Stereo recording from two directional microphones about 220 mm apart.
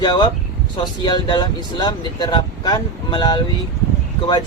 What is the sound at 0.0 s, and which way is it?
Speech, 20° left (ahead or behind).